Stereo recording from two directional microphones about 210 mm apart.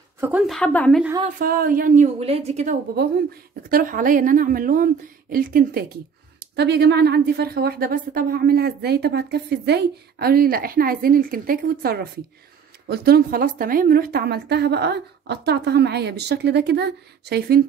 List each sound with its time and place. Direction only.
0.2 s a woman's voice: 5° right (ahead or behind)
1.4 s a woman's voice: 40° right (ahead or behind)